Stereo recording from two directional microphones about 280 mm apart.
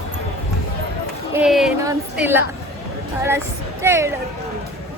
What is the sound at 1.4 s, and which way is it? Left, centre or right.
Speech, centre.